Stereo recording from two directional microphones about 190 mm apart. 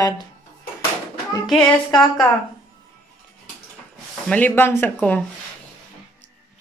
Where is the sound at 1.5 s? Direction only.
5° left (ahead or behind).